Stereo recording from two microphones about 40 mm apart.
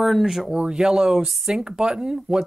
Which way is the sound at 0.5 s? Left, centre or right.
Right.